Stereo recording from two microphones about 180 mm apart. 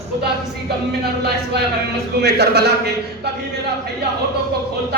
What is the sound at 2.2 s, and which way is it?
Speech, 65° right (ahead or behind).